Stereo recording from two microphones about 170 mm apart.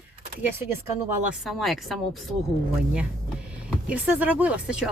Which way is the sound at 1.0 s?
15° right (ahead or behind).